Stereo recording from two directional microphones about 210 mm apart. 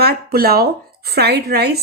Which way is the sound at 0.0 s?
45° right (ahead or behind).